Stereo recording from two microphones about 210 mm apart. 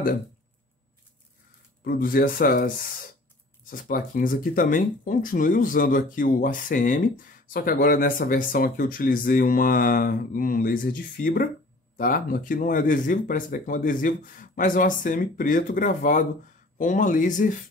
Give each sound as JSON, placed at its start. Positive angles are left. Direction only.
{"t": 1.9, "sound": "speech", "side_deg": 45}